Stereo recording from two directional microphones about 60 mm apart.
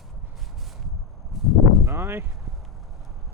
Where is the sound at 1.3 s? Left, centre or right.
Centre.